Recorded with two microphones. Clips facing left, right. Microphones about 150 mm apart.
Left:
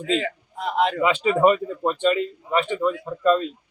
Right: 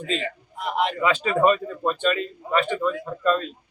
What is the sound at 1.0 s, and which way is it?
Speech, 20° left (ahead or behind).